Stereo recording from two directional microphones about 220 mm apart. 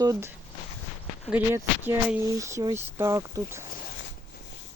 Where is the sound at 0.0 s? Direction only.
15° right (ahead or behind).